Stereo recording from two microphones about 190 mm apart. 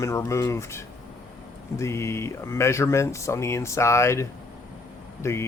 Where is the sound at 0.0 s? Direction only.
15° left (ahead or behind).